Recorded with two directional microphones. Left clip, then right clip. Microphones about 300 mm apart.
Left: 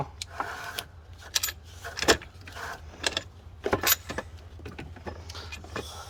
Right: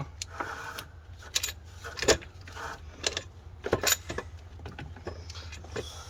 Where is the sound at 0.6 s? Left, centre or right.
Left.